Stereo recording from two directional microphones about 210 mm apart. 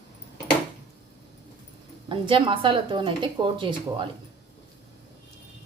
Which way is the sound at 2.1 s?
25° right (ahead or behind).